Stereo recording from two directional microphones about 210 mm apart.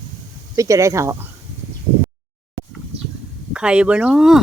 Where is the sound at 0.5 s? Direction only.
15° right (ahead or behind).